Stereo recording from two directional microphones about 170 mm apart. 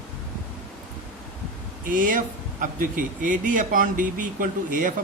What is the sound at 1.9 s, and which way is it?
Speech, 50° right (ahead or behind).